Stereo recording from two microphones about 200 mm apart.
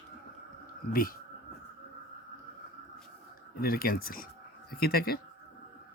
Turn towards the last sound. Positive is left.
turn(degrees=50)  # may be behind; listen again after turning